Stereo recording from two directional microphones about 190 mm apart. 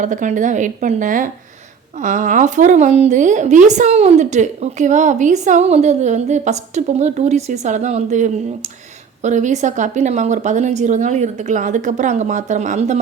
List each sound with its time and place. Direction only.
0.0 s a woman's voice: 40° right (ahead or behind)